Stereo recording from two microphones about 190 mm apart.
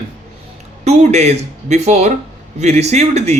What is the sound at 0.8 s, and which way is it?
Speech, 35° right (ahead or behind).